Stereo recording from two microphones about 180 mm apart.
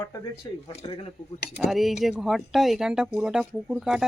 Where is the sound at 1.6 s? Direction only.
Centre (ahead or behind).